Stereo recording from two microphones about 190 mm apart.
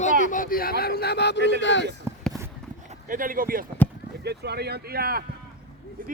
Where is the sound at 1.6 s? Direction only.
70° left (ahead or behind).